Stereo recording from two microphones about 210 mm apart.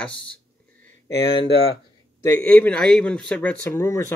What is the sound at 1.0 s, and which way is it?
Speech, 20° left (ahead or behind).